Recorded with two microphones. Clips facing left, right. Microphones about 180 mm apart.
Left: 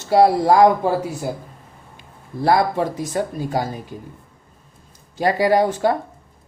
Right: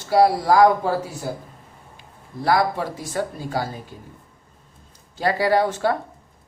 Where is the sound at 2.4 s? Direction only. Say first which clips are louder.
Left 3 dB; 25° left (ahead or behind).